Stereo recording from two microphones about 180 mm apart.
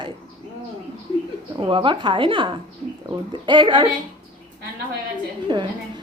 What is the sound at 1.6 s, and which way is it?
Speech, 30° right (ahead or behind).